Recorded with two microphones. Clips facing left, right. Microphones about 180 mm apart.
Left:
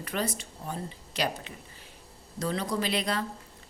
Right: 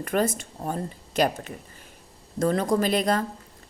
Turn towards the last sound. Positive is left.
turn(degrees=-45)  # may be behind; listen again after turning